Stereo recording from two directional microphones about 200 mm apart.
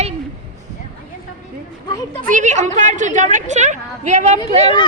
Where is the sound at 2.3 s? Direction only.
40° right (ahead or behind).